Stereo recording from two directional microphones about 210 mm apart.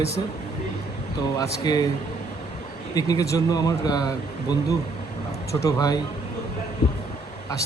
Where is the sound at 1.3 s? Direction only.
15° left (ahead or behind).